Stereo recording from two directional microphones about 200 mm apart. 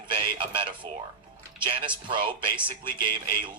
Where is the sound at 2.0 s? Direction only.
25° right (ahead or behind).